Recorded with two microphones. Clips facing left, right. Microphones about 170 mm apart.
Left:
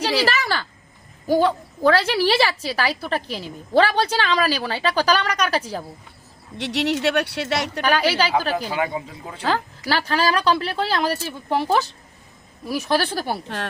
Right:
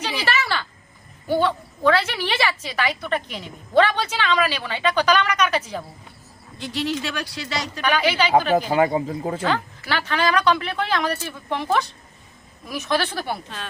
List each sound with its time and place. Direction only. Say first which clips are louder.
0.3 s a woman's voice: left 1 dB; 40° left (ahead or behind)
6.6 s speech: left 4 dB; 80° left
7.9 s a woman's voice: even; 35° left (ahead or behind)
8.5 s speech: right 6 dB; 40° right (ahead or behind)
9.4 s a woman's voice: even; 35° left (ahead or behind)